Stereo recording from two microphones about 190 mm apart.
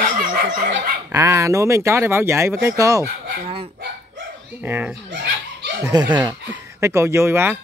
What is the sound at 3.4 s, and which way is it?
Speech, 30° right (ahead or behind).